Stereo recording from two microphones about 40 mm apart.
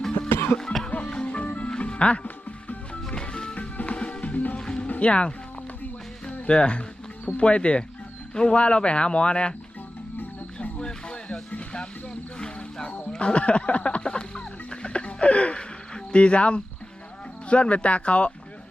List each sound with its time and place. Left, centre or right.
0.3 s cough: left
0.5 s cough: centre
0.9 s music: left
4.9 s speech: left
6.4 s speech: left
10.6 s music: left
13.1 s music: left
16.1 s speech: left